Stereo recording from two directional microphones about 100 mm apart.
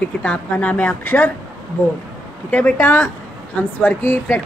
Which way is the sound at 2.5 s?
20° left (ahead or behind).